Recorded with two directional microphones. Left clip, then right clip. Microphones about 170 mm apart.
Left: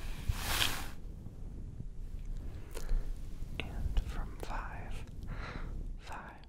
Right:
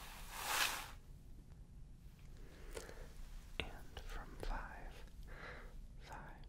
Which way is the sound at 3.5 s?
30° left (ahead or behind).